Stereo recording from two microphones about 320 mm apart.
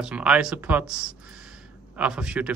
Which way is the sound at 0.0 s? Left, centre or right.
Centre.